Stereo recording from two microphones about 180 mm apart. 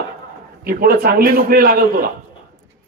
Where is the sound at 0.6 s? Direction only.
55° right (ahead or behind).